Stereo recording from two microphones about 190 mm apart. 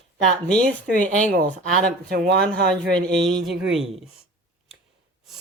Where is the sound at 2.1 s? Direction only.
55° right (ahead or behind).